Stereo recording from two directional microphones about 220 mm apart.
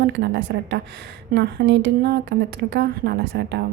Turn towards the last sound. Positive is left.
turn(degrees=-50)  # may be behind; listen again after turning